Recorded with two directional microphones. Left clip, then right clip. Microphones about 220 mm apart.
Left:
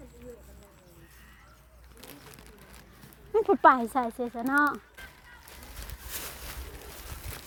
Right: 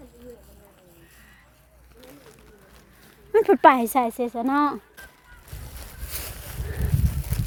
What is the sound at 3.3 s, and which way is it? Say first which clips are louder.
A woman's voice: right 5 dB; 30° right (ahead or behind).